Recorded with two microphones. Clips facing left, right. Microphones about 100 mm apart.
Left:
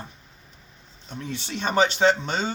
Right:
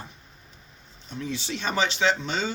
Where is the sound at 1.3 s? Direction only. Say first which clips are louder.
Left 2 dB; 55° left (ahead or behind).